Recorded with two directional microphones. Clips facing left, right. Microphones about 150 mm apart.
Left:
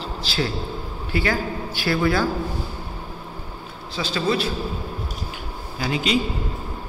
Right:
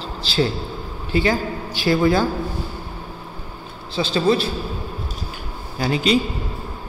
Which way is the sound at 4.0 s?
30° right (ahead or behind).